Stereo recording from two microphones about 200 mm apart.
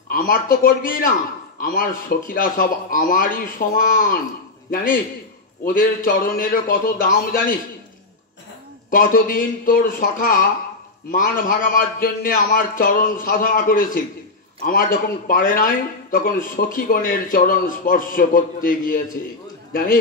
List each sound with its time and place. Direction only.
0.1 s a man's voice: 45° left (ahead or behind)
8.9 s a man's voice: 45° left (ahead or behind)